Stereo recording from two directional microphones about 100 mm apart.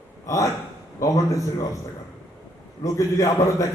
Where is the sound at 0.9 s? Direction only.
35° left (ahead or behind).